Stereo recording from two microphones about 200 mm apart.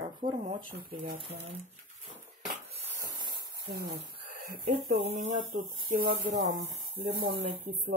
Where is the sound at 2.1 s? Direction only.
10° right (ahead or behind).